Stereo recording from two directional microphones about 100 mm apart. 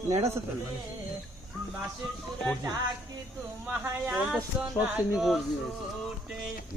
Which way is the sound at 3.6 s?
10° right (ahead or behind).